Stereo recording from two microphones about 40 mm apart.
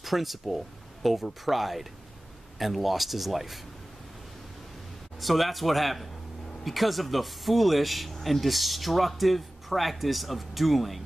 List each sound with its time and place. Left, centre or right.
0.0 s speech: centre
5.2 s speech: centre